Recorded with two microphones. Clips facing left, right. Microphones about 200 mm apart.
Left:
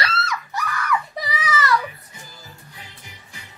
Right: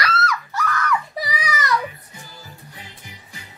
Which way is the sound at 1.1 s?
10° right (ahead or behind).